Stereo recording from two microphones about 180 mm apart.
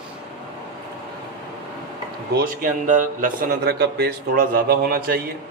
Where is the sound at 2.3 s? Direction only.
50° right (ahead or behind).